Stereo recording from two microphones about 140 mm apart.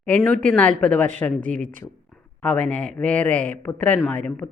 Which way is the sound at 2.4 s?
10° left (ahead or behind).